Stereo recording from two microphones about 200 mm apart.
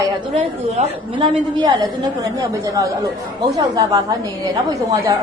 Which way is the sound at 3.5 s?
20° right (ahead or behind).